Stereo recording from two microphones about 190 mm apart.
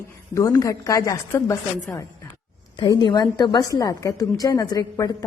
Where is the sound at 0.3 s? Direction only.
15° left (ahead or behind).